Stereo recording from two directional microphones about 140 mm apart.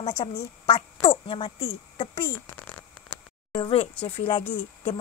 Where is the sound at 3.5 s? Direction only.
35° left (ahead or behind).